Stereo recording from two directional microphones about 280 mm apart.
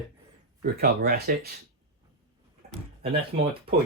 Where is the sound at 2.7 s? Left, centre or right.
Centre.